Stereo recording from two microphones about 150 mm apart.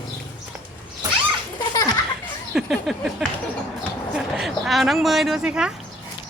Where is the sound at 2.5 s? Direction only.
Centre (ahead or behind).